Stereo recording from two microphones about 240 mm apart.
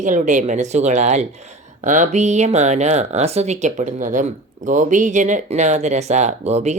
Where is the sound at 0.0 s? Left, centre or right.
Right.